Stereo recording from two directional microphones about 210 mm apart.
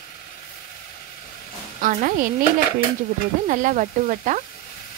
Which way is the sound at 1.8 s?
40° right (ahead or behind).